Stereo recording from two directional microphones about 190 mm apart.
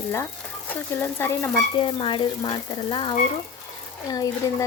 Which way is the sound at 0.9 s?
15° left (ahead or behind).